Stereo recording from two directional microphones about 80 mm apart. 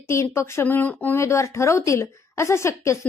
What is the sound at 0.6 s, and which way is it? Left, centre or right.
Speech, left.